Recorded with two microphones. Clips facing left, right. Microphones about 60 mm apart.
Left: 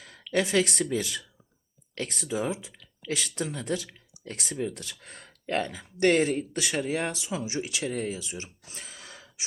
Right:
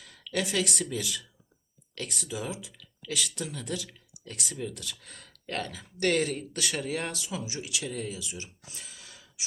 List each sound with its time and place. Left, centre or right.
0.0 s speech: left
7.4 s speech: left